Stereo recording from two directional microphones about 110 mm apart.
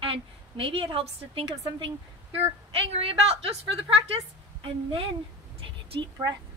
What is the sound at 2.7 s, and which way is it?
A woman's voice, 60° right (ahead or behind).